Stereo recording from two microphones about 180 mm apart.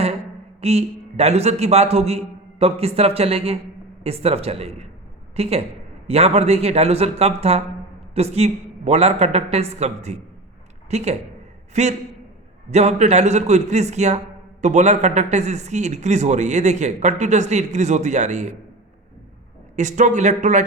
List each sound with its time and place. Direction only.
0.6 s a man's voice: 35° right (ahead or behind)
19.7 s speech: 40° right (ahead or behind)